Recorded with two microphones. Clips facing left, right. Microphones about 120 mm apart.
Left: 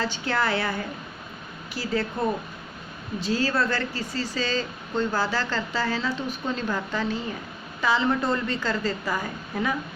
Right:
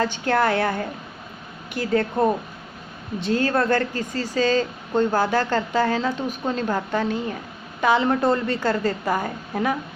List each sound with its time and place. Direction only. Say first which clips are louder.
0.0 s speech: right 5 dB; 50° right (ahead or behind)